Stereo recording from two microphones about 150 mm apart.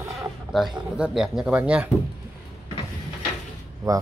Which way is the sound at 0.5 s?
Centre (ahead or behind).